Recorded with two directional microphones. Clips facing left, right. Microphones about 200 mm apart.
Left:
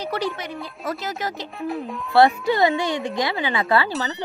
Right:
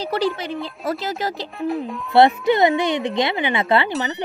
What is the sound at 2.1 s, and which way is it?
Speech, 20° right (ahead or behind).